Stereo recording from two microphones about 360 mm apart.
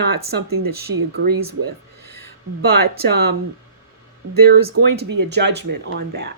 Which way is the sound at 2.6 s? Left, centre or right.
Right.